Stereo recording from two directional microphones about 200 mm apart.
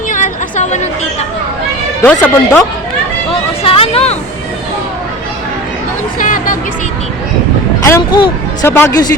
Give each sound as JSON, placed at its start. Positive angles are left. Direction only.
{"t": 0.1, "sound": "a sound", "side_deg": 40}
{"t": 2.2, "sound": "speech", "side_deg": 10}
{"t": 3.6, "sound": "vehicle", "side_deg": 30}
{"t": 6.1, "sound": "music", "side_deg": 45}
{"t": 7.9, "sound": "speech", "side_deg": 15}